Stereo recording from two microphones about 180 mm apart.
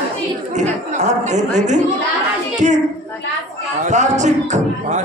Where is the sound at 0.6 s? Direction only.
40° right (ahead or behind).